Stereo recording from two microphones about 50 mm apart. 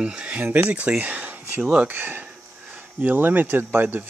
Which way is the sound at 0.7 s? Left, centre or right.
Right.